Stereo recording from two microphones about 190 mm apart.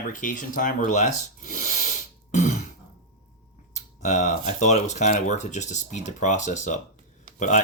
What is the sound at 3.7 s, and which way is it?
Speech, 40° left (ahead or behind).